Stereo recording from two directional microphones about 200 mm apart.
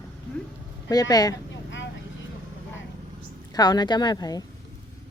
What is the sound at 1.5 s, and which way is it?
Vehicle, 65° left (ahead or behind).